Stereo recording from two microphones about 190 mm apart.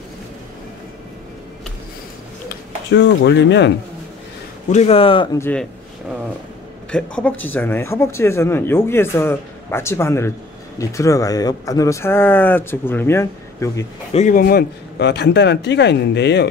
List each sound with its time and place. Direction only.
2.9 s speech: 65° left (ahead or behind)
4.6 s speech: 35° left (ahead or behind)
5.4 s speech: 5° left (ahead or behind)
6.9 s speech: 5° left (ahead or behind)
14.1 s speech: 45° left (ahead or behind); by 16.4 s 65° left (ahead or behind)